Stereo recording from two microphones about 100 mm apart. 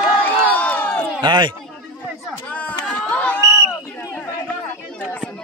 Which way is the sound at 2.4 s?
15° left (ahead or behind).